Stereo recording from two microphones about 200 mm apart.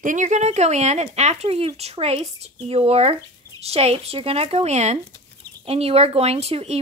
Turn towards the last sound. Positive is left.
turn(degrees=-30)  # may be behind; listen again after turning